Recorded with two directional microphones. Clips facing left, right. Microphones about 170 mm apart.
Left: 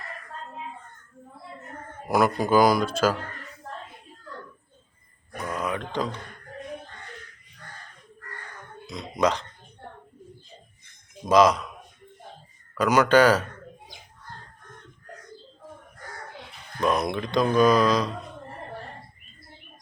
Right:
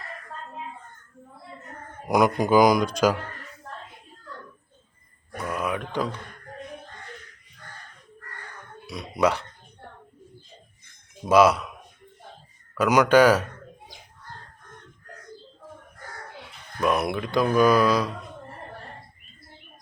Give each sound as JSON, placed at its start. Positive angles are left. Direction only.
{"t": 2.0, "sound": "speech", "side_deg": -15}
{"t": 5.4, "sound": "a sound", "side_deg": -10}
{"t": 5.9, "sound": "speech", "side_deg": -10}
{"t": 8.9, "sound": "speech", "side_deg": -10}
{"t": 11.3, "sound": "speech", "side_deg": -10}
{"t": 12.7, "sound": "speech", "side_deg": -10}
{"t": 16.8, "sound": "speech", "side_deg": -5}